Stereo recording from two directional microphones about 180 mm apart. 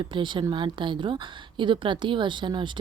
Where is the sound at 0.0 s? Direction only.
25° right (ahead or behind).